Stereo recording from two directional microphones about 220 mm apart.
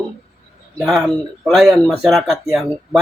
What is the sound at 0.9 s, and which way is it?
Speech, centre (ahead or behind).